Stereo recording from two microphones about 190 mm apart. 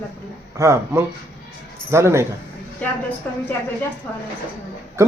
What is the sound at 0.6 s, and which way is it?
A man's voice, 15° right (ahead or behind).